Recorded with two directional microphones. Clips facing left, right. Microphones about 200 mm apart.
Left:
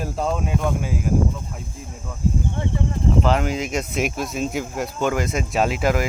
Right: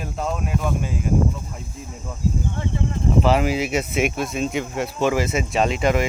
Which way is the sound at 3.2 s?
5° right (ahead or behind).